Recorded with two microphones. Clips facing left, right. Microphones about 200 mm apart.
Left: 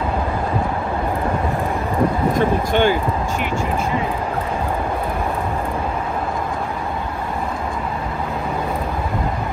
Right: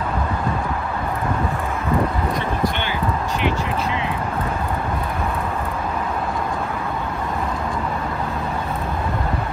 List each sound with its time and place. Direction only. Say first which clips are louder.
2.3 s speech: left 6 dB; 45° left (ahead or behind)